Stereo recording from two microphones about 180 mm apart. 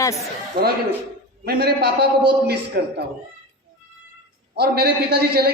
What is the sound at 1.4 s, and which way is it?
A man's voice, 60° right (ahead or behind).